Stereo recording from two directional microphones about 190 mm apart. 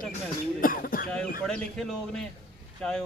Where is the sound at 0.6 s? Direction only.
50° left (ahead or behind).